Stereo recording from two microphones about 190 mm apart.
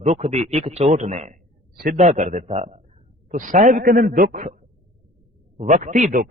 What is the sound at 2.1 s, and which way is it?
A man's voice, 35° right (ahead or behind).